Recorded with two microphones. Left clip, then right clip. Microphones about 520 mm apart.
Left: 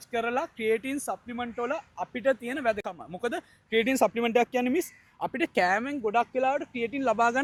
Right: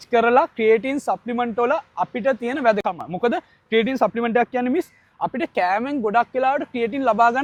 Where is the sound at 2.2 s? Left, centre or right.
Right.